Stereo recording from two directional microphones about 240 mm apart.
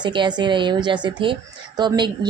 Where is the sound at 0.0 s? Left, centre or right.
Centre.